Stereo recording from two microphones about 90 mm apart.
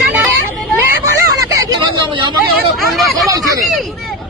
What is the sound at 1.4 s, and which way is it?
Hubbub, 35° right (ahead or behind).